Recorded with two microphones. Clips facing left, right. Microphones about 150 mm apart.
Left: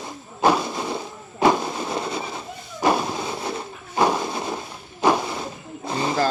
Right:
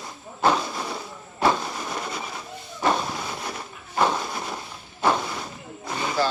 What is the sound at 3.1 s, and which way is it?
Printer, 25° left (ahead or behind).